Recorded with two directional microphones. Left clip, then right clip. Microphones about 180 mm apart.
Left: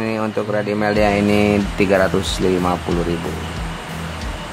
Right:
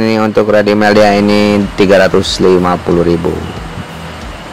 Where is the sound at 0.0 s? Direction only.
35° right (ahead or behind).